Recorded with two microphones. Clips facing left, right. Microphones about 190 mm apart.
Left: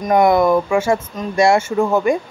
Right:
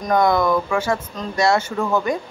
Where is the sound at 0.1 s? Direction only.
25° left (ahead or behind).